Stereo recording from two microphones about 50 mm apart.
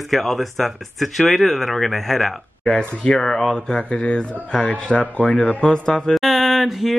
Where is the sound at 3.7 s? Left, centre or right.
Centre.